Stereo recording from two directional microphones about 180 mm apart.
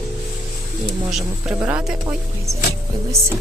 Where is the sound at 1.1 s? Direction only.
5° right (ahead or behind).